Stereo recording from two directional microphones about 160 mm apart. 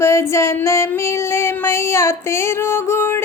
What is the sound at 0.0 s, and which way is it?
Female singing, 15° left (ahead or behind).